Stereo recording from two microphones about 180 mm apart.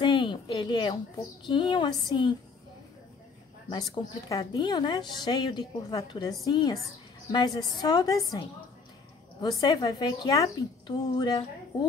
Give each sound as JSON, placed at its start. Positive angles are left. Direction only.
{"t": 0.0, "sound": "a sound", "side_deg": 30}
{"t": 1.4, "sound": "a woman's voice", "side_deg": 25}
{"t": 3.7, "sound": "a woman's voice", "side_deg": 25}
{"t": 9.4, "sound": "a woman's voice", "side_deg": 25}